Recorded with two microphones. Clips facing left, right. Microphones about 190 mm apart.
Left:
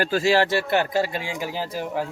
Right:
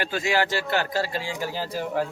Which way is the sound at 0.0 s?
35° left (ahead or behind).